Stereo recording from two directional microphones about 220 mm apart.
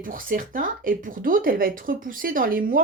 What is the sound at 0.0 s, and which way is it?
Speech, 40° right (ahead or behind).